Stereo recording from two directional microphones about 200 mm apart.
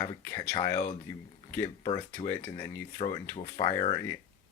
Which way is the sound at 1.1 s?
15° left (ahead or behind).